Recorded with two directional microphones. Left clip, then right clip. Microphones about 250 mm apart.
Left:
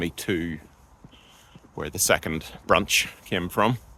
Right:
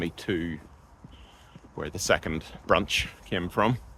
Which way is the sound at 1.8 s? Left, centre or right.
Left.